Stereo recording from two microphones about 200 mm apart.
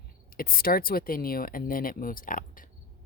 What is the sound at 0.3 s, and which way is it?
Speech, 45° left (ahead or behind).